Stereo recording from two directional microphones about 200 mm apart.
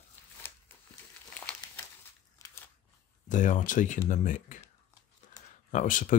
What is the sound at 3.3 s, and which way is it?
Speech, 40° left (ahead or behind).